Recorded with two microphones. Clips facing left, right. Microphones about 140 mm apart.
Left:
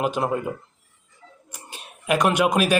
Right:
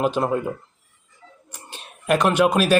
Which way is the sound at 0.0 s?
5° left (ahead or behind).